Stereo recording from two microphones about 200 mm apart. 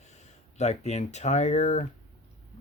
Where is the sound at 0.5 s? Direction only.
35° left (ahead or behind).